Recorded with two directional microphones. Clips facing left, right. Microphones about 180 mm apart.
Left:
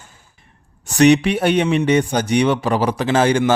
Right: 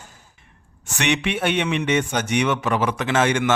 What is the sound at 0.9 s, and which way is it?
A man's voice, 35° left (ahead or behind).